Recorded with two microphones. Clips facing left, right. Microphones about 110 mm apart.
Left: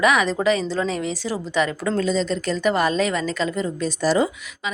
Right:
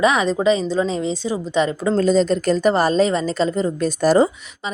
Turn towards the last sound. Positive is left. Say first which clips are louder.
# right 3 dB
turn(degrees=-30)  # may be behind; listen again after turning